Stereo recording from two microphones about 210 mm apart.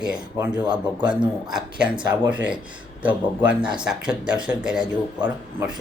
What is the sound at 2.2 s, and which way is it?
Speech, 5° right (ahead or behind).